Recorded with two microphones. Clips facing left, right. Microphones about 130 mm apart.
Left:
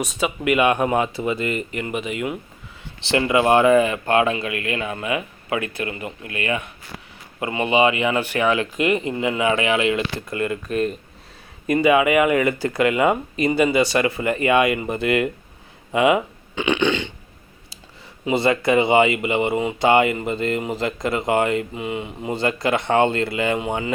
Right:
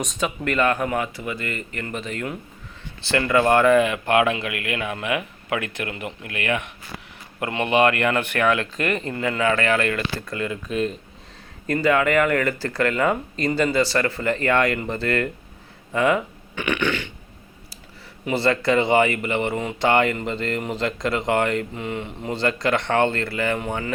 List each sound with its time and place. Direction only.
0.0 s speech: 5° left (ahead or behind)
7.3 s speech: 5° left (ahead or behind)
10.4 s speech: centre (ahead or behind)
11.6 s speech: 10° left (ahead or behind)
18.3 s speech: 15° left (ahead or behind)